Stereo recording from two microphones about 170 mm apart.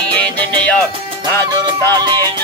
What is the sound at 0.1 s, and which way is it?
Music, 5° left (ahead or behind).